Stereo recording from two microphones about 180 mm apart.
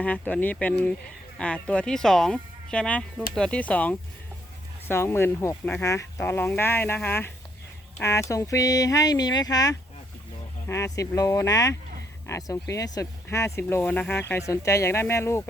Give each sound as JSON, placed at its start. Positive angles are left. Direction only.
{"t": 0.0, "sound": "speech", "side_deg": 10}